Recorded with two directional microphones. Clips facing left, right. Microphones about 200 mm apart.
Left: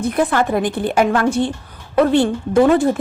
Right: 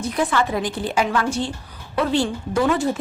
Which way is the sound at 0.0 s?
55° left (ahead or behind).